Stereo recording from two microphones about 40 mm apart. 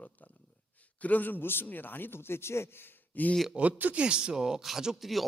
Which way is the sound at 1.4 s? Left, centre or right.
Left.